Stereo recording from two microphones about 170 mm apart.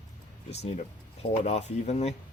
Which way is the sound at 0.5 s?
40° left (ahead or behind).